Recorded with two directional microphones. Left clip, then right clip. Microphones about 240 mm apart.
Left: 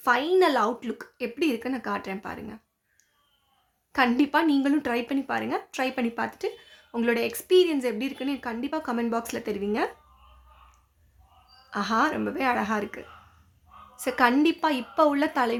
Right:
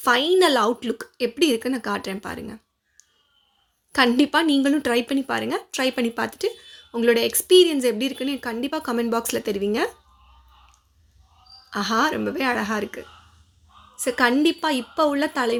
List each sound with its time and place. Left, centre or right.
0.0 s speech: right
3.9 s speech: right
11.7 s a woman's voice: centre